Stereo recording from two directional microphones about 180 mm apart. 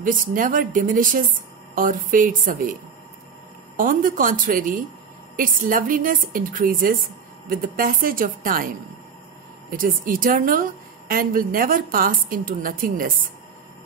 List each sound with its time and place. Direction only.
0.0 s a woman's voice: 45° right (ahead or behind)
3.7 s a woman's voice: 50° right (ahead or behind)